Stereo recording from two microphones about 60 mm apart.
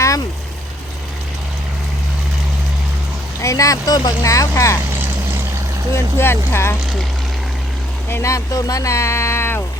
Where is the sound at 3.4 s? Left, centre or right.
Left.